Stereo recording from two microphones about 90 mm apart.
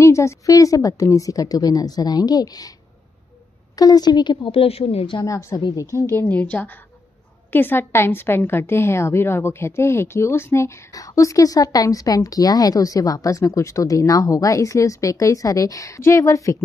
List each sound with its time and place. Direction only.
0.0 s a woman's voice: 35° left (ahead or behind)
3.7 s speech: 45° left (ahead or behind); by 5.2 s 80° left
5.2 s a woman's voice: 35° left (ahead or behind)
6.1 s a woman's voice: 20° left (ahead or behind); by 16.5 s 35° left (ahead or behind)